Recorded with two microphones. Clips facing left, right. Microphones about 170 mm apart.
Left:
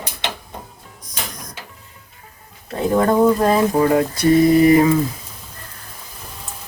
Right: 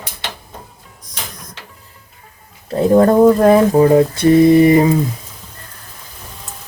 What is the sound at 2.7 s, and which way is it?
Speech, 35° right (ahead or behind).